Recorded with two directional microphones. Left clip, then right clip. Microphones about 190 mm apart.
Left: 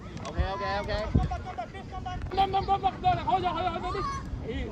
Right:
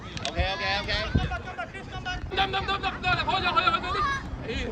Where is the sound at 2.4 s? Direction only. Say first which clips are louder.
Left 2 dB; 35° left (ahead or behind).